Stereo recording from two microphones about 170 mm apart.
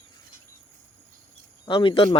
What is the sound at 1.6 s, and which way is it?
Speech, 30° left (ahead or behind).